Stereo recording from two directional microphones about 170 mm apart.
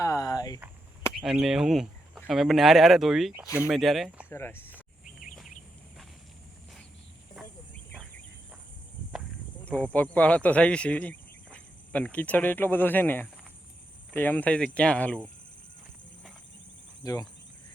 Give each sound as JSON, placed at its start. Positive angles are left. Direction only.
{"t": 0.0, "sound": "a sound", "side_deg": 20}
{"t": 1.2, "sound": "speech", "side_deg": -5}
{"t": 4.3, "sound": "speech", "side_deg": 15}
{"t": 9.7, "sound": "speech", "side_deg": 10}
{"t": 17.0, "sound": "speech", "side_deg": 20}